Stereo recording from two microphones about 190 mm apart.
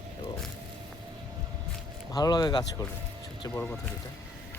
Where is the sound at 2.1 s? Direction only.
20° left (ahead or behind).